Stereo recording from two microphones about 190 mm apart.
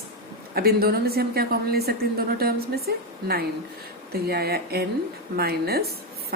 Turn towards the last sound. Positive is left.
turn(degrees=-55)  # may be behind; listen again after turning